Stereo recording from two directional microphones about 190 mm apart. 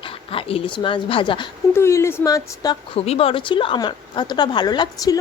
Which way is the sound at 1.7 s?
15° left (ahead or behind).